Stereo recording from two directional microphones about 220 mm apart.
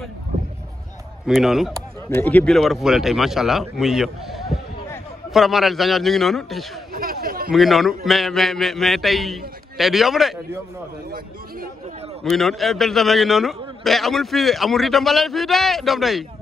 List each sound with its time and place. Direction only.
1.2 s a man's voice: centre (ahead or behind)
2.0 s a man's voice: 10° left (ahead or behind)
6.9 s chatter: 40° right (ahead or behind)
7.5 s a man's voice: centre (ahead or behind)
12.3 s a man's voice: centre (ahead or behind)